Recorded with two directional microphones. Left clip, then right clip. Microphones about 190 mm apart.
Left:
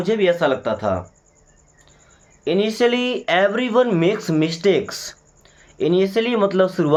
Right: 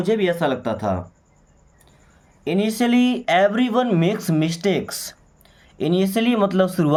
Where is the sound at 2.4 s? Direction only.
30° right (ahead or behind).